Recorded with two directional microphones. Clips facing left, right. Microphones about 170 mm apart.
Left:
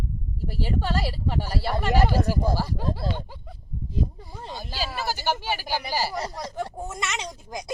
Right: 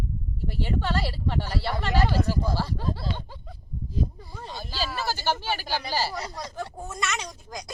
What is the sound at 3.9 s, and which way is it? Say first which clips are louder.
Speech: left 1 dB; 20° left (ahead or behind).